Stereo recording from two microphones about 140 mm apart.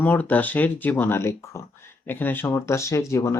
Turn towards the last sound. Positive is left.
turn(degrees=20)  # may be behind; listen again after turning